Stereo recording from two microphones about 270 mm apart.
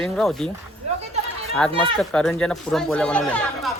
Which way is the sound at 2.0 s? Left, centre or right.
Centre.